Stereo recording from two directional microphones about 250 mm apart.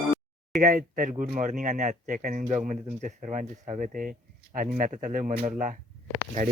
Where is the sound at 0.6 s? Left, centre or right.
Right.